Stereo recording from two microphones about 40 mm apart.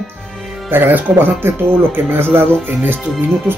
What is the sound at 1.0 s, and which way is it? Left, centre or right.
Speech, right.